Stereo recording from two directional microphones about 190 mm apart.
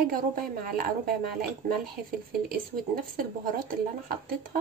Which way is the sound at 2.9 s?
45° right (ahead or behind).